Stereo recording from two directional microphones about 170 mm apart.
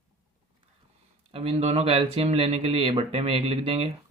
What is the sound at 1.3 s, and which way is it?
Speech, 35° right (ahead or behind).